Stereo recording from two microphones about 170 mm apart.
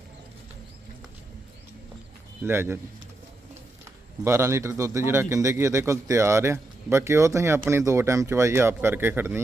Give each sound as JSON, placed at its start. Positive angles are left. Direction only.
{"t": 2.4, "sound": "a man's voice", "side_deg": -15}
{"t": 4.2, "sound": "a man's voice", "side_deg": -15}